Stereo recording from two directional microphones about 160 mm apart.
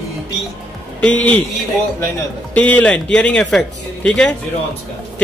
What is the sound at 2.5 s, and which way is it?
A man's voice, 10° left (ahead or behind).